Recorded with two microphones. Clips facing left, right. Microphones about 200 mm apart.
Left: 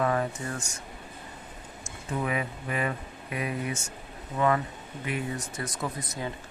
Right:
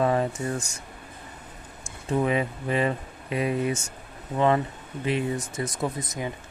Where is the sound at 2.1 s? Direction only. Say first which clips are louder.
Right 6 dB; 25° right (ahead or behind).